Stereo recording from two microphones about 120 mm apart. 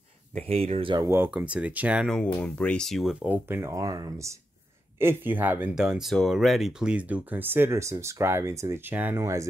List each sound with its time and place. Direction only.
0.5 s speech: 55° right (ahead or behind)
1.0 s speech: 20° right (ahead or behind)
1.3 s speech: 10° right (ahead or behind)
2.0 s speech: 5° left (ahead or behind)
3.3 s speech: 15° right (ahead or behind)
5.0 s speech: 15° right (ahead or behind)
5.8 s speech: 5° right (ahead or behind)
9.2 s speech: 25° right (ahead or behind)